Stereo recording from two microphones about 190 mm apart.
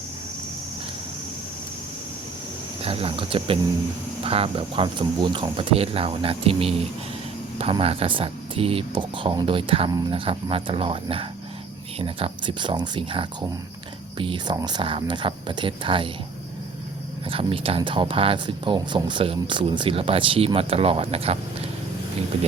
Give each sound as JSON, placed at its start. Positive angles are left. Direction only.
{"t": 2.8, "sound": "speech", "side_deg": -30}
{"t": 17.2, "sound": "speech", "side_deg": -30}
{"t": 22.3, "sound": "speech", "side_deg": -30}